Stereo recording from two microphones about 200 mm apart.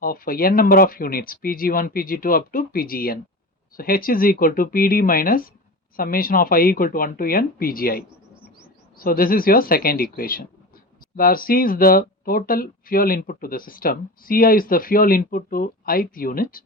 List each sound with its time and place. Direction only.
0.0 s speech: 45° left (ahead or behind)